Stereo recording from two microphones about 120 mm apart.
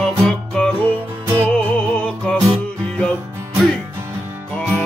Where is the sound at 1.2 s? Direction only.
20° right (ahead or behind).